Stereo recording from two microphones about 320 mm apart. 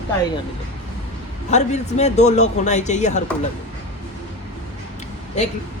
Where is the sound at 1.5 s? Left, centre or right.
Left.